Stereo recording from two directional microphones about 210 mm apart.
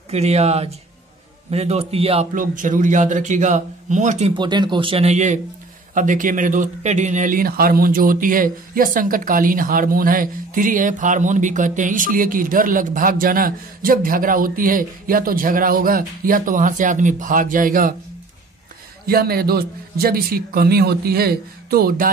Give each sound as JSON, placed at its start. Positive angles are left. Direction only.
{"t": 0.1, "sound": "speech", "side_deg": -30}
{"t": 4.3, "sound": "speech", "side_deg": -20}
{"t": 19.0, "sound": "a man's voice", "side_deg": -45}